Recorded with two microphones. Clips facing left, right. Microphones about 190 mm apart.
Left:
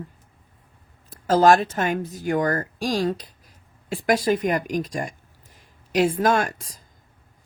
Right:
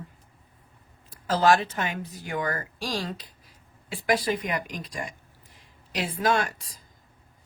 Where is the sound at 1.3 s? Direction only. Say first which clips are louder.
Left 5 dB; 45° left (ahead or behind).